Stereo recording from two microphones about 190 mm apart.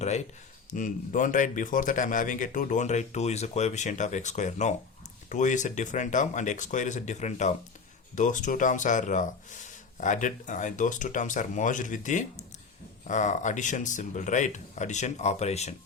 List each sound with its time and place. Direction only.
0.7 s a man's voice: 45° left (ahead or behind)